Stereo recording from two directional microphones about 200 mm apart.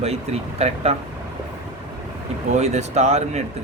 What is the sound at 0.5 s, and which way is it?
Speech, 30° right (ahead or behind).